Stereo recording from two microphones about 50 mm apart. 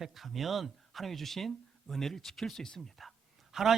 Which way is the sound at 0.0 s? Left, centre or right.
Centre.